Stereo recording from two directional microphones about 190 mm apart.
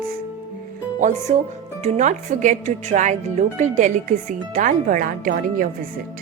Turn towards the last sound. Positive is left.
turn(degrees=-45)  # may be behind; listen again after turning